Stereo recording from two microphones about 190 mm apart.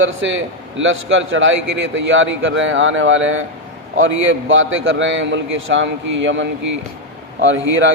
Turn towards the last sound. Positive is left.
turn(degrees=-90)